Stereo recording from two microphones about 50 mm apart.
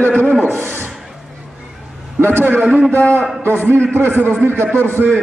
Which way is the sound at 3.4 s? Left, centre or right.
Right.